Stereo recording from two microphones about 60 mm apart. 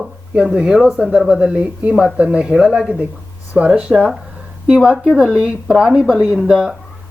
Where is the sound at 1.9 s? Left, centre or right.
Centre.